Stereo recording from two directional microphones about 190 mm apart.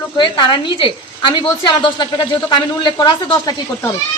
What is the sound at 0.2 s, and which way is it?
A woman's voice, 25° left (ahead or behind).